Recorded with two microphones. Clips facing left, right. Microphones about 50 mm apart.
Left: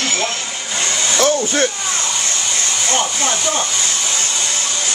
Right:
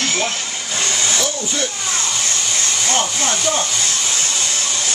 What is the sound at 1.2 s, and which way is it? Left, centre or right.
Speech, left.